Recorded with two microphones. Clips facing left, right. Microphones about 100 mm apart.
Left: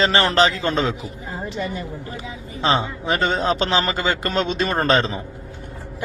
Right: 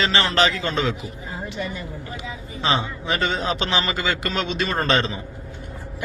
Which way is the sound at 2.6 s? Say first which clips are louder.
Left 3 dB; 35° left (ahead or behind).